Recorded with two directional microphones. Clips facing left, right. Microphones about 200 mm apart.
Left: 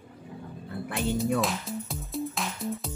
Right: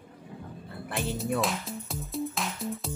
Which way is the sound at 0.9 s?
Centre (ahead or behind).